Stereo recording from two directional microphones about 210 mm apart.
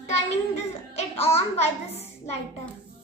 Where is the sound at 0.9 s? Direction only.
30° left (ahead or behind).